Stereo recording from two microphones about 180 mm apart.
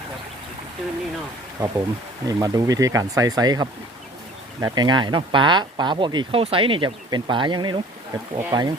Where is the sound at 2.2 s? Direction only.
20° right (ahead or behind).